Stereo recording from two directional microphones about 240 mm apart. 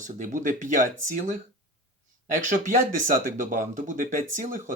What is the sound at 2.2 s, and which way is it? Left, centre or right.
Speech, right.